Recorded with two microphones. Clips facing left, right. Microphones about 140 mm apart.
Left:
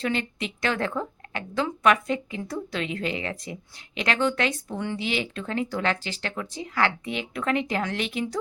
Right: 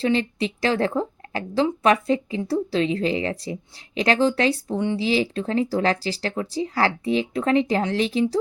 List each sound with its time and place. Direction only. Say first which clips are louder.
0.0 s a woman's voice: right 6 dB; 30° right (ahead or behind)